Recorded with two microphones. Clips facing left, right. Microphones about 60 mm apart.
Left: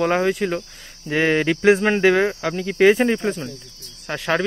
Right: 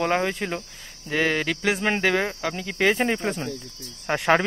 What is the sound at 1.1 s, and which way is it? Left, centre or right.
Speech, centre.